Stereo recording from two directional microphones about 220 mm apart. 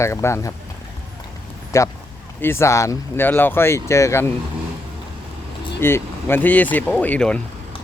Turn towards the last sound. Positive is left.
turn(degrees=5)  # may be behind; listen again after turning